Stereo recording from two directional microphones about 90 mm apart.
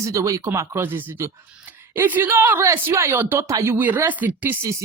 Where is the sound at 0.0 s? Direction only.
35° right (ahead or behind).